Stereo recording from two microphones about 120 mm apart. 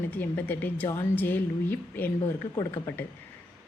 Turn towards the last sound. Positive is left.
turn(degrees=20)  # may be behind; listen again after turning